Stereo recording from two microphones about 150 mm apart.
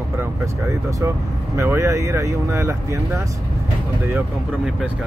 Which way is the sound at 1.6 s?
20° right (ahead or behind).